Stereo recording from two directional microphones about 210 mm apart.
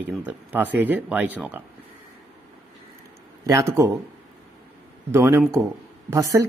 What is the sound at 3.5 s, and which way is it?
Speech, 15° right (ahead or behind).